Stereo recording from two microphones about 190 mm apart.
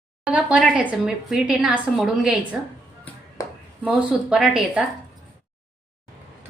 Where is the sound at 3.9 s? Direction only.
Centre (ahead or behind).